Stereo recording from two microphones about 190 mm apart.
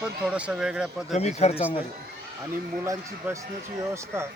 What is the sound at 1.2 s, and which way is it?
Speech, 35° left (ahead or behind).